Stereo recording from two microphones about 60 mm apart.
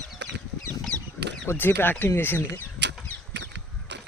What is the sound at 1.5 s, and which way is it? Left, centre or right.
Speech, left.